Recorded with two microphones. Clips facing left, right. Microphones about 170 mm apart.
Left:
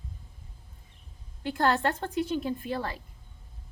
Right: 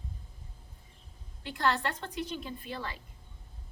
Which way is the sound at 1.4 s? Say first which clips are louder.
Left 5 dB; 45° left (ahead or behind).